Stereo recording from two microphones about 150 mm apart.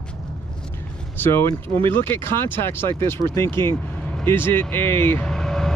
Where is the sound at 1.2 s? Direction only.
15° left (ahead or behind).